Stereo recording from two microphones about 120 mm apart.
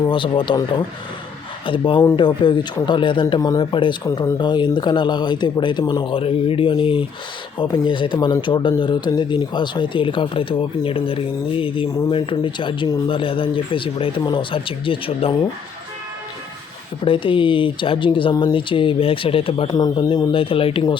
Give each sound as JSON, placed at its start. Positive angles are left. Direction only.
{"t": 0.1, "sound": "a man's voice", "side_deg": 45}
{"t": 17.0, "sound": "a man's voice", "side_deg": 45}
{"t": 19.6, "sound": "speech", "side_deg": 35}
{"t": 20.3, "sound": "a man's voice", "side_deg": 50}